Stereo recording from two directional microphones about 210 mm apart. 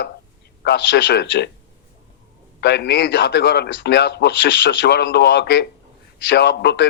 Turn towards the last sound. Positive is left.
turn(degrees=55)  # may be behind; listen again after turning